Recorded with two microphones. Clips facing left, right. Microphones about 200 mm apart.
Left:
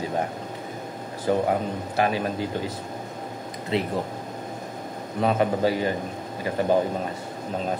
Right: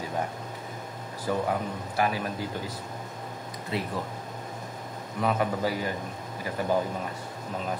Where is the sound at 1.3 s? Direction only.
25° left (ahead or behind).